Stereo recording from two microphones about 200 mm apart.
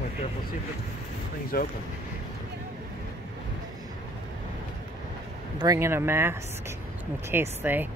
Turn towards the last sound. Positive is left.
turn(degrees=-10)  # may be behind; listen again after turning